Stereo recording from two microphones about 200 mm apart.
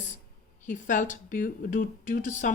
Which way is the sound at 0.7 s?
40° left (ahead or behind).